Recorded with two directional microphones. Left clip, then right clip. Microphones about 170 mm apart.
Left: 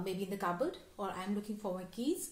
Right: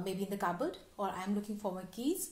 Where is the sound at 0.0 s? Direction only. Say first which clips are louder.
Right 1 dB; 30° right (ahead or behind).